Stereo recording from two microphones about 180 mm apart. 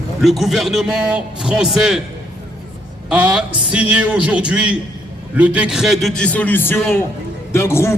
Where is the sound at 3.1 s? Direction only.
5° right (ahead or behind).